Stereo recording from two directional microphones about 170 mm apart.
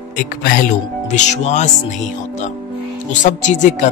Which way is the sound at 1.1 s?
45° left (ahead or behind).